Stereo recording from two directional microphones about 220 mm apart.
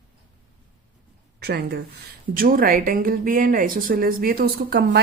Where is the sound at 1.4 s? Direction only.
45° right (ahead or behind).